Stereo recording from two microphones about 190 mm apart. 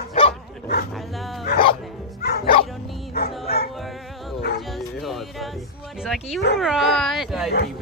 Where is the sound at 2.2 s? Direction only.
55° left (ahead or behind).